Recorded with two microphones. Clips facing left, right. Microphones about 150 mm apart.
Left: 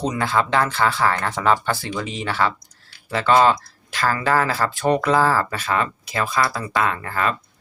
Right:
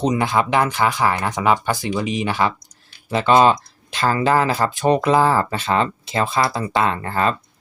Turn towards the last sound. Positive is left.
turn(degrees=-30)  # may be behind; listen again after turning